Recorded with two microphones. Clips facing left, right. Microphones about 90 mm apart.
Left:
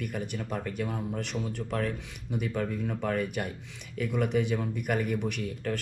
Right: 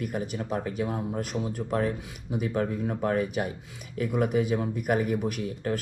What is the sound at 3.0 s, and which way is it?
Speech, 10° right (ahead or behind).